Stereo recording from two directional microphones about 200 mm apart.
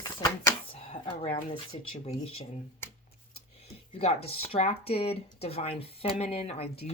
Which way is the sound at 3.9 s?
30° left (ahead or behind).